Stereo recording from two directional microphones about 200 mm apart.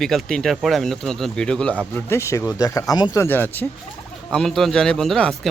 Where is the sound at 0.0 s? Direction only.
Centre (ahead or behind).